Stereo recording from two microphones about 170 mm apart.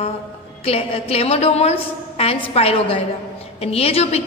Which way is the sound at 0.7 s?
35° left (ahead or behind).